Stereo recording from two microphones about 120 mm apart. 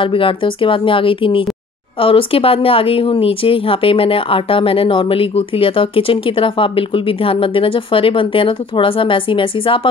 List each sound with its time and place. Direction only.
0.0 s speech: 45° left (ahead or behind)